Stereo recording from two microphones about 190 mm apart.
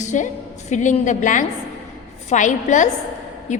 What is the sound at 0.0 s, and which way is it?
A woman's voice, 40° left (ahead or behind).